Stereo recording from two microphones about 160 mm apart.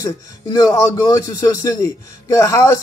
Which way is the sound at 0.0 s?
20° left (ahead or behind).